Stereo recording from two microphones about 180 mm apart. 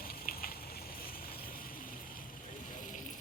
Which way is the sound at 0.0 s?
55° left (ahead or behind).